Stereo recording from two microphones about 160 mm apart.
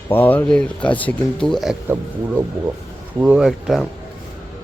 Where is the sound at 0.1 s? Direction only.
10° left (ahead or behind).